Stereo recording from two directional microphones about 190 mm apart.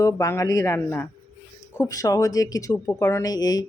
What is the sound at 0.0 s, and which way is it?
Speech, 15° left (ahead or behind).